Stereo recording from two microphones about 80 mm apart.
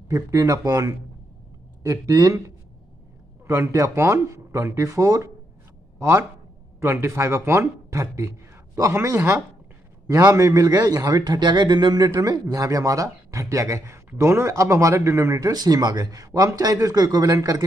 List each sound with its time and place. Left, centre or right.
0.1 s speech: right
12.1 s speech: right
15.5 s speech: right